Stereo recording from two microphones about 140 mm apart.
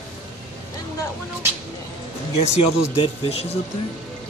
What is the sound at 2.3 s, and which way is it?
Speech, 45° left (ahead or behind).